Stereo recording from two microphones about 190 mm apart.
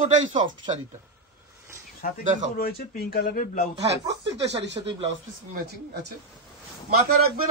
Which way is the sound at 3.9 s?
65° right (ahead or behind).